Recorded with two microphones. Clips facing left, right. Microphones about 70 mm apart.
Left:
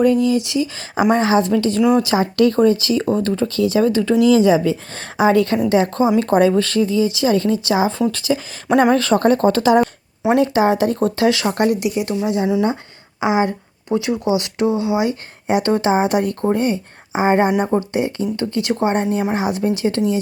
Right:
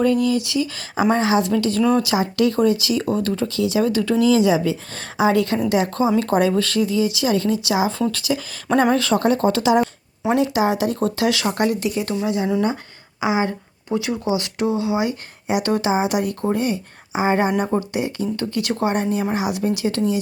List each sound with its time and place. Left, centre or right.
0.0 s speech: left
1.1 s speech: left
15.4 s speech: left